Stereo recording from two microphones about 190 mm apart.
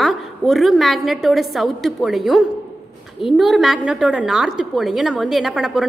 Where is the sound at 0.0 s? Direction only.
Centre (ahead or behind).